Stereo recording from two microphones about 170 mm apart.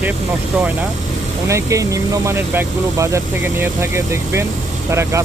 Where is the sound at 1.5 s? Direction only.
20° right (ahead or behind).